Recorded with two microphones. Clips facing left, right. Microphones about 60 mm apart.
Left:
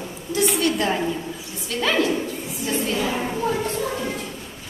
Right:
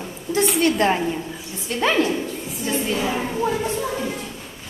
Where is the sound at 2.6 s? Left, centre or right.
Centre.